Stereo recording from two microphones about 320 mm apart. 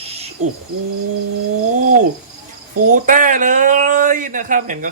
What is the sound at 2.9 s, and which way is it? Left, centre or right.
Speech, right.